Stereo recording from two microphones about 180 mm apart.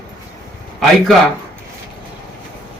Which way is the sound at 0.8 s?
Centre (ahead or behind).